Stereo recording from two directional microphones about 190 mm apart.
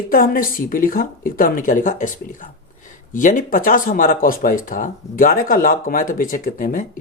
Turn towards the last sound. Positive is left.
turn(degrees=45)  # may be behind; listen again after turning